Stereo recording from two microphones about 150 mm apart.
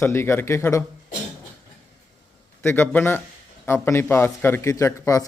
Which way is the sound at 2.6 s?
10° left (ahead or behind).